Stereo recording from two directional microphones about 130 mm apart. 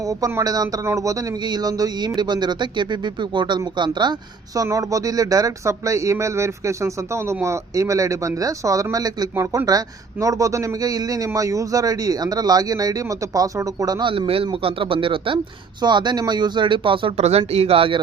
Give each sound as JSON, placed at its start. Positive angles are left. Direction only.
{"t": 0.1, "sound": "speech", "side_deg": -25}
{"t": 4.5, "sound": "speech", "side_deg": -25}
{"t": 14.1, "sound": "speech", "side_deg": -45}